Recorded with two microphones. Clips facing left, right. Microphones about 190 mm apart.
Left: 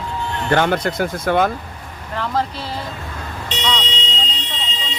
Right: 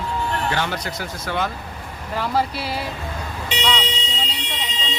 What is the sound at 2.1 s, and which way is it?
Speech, 10° right (ahead or behind).